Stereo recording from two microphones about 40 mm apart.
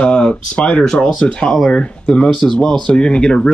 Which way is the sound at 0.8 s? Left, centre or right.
Centre.